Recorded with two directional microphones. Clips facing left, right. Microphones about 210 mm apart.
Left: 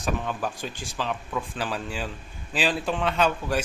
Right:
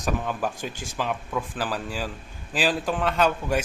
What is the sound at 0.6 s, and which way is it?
Speech, 50° right (ahead or behind).